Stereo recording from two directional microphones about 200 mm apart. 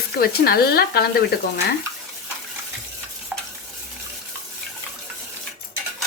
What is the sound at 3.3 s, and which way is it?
Stir, 5° right (ahead or behind).